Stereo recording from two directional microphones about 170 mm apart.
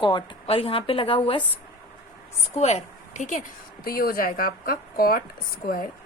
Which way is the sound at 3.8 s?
60° left (ahead or behind).